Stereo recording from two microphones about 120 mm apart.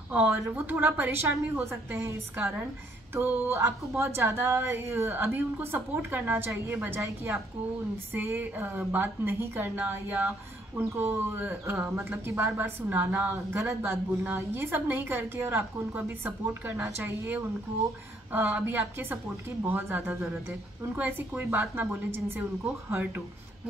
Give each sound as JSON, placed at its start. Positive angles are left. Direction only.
{"t": 0.1, "sound": "a woman's voice", "side_deg": -15}